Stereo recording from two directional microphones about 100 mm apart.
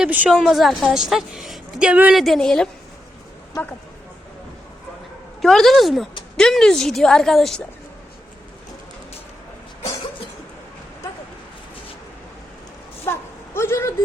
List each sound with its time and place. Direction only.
0.3 s a woman's voice: centre (ahead or behind)
2.1 s a woman's voice: centre (ahead or behind)
5.4 s a woman's voice: 5° left (ahead or behind)
13.1 s a sound: 25° left (ahead or behind)